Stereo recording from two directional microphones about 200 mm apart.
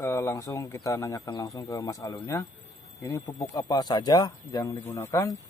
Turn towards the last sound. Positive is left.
turn(degrees=15)  # may be behind; listen again after turning